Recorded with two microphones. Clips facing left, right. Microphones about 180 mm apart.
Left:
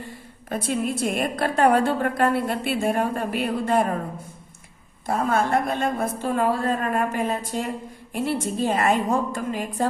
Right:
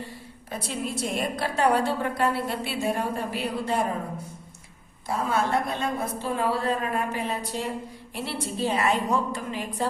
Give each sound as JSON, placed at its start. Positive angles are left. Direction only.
{"t": 0.5, "sound": "a woman's voice", "side_deg": 55}
{"t": 5.0, "sound": "a woman's voice", "side_deg": 50}